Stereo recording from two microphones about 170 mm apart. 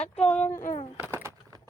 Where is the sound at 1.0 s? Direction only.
15° right (ahead or behind).